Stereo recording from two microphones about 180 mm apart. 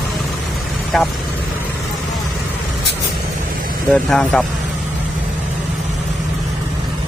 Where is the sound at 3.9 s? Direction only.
5° left (ahead or behind).